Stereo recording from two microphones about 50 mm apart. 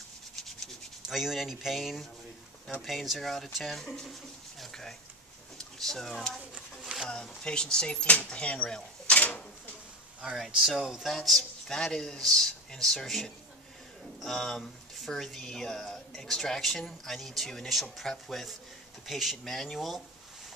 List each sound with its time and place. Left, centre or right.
1.0 s speech: centre
4.6 s a sound: centre
5.8 s speech: centre
7.1 s speech: centre
10.2 s speech: centre
11.7 s speech: centre